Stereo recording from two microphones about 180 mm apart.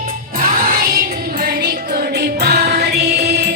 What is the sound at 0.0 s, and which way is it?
Music, 45° right (ahead or behind).